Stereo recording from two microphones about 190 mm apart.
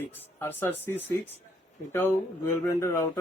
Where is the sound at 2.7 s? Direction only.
15° left (ahead or behind).